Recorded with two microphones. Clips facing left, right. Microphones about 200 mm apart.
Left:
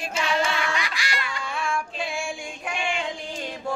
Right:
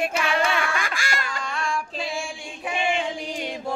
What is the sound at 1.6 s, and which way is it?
Child singing, centre (ahead or behind).